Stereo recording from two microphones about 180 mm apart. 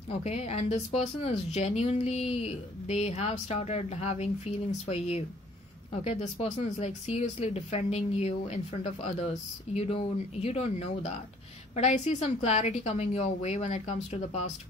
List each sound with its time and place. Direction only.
0.1 s speech: 35° left (ahead or behind)